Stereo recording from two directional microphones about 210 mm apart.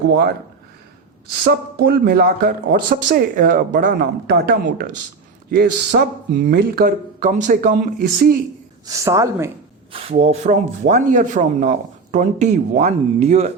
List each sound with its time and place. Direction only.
1.5 s speech: 50° right (ahead or behind)
8.9 s a woman's voice: 15° right (ahead or behind)
9.9 s speech: 30° right (ahead or behind)